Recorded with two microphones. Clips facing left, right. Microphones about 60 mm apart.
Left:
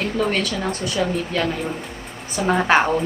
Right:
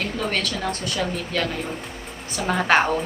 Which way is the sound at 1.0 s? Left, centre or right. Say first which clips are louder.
Left 5 dB; left.